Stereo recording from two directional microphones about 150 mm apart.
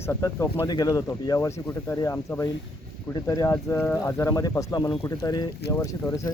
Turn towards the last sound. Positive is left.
turn(degrees=20)  # may be behind; listen again after turning